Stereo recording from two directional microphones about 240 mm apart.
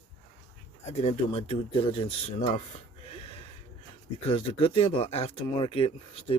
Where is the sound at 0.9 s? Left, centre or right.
Left.